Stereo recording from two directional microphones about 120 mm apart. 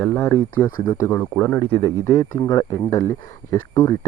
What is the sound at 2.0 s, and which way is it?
Speech, 35° left (ahead or behind).